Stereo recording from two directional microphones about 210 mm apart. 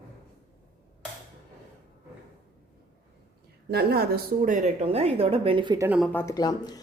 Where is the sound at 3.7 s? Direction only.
50° right (ahead or behind); by 5.9 s 20° right (ahead or behind).